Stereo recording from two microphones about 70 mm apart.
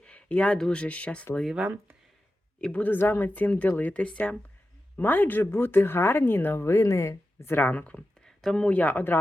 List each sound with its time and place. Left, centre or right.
0.0 s speech: centre
2.6 s speech: centre
2.8 s speech: left
7.5 s speech: left